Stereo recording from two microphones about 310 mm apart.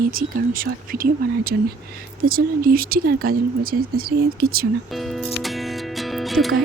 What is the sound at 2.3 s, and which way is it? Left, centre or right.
Speech, right.